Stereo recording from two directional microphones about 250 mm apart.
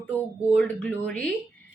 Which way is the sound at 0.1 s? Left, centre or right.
Centre.